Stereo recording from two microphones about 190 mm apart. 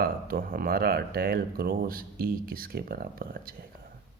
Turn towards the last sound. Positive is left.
turn(degrees=-50)  # may be behind; listen again after turning